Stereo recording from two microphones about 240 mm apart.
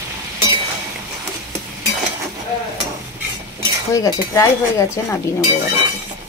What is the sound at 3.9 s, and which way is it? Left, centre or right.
A woman's voice, centre.